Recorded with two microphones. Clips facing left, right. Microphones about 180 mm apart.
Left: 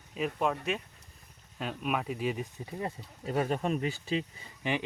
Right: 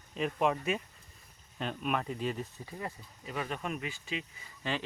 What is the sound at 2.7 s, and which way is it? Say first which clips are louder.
Speech: left 7 dB; 25° left (ahead or behind).